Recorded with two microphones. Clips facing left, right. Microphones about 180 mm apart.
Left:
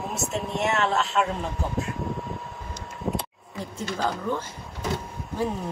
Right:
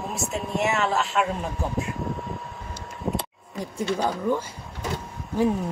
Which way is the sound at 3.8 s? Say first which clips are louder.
Right 3 dB; 15° right (ahead or behind).